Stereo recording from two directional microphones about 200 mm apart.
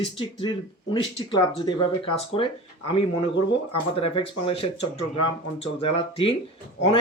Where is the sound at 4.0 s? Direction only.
25° left (ahead or behind).